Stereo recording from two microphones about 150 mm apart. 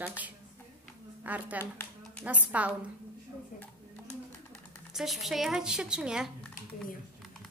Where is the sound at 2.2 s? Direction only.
10° right (ahead or behind).